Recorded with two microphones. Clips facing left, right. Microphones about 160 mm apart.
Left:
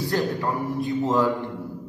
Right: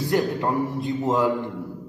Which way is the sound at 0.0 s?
20° right (ahead or behind).